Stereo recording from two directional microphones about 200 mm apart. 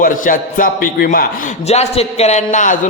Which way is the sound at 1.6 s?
35° left (ahead or behind).